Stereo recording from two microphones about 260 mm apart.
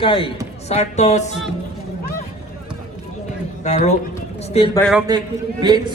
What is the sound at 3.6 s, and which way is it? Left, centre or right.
A man's voice, left.